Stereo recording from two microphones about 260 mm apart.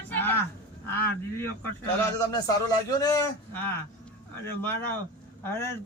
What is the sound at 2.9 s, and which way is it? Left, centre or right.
A man's voice, centre.